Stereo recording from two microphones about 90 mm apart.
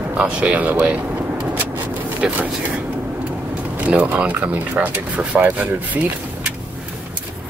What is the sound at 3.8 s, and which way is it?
Speech, 15° right (ahead or behind).